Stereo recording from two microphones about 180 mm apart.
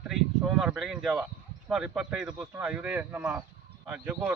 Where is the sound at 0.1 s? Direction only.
Centre (ahead or behind).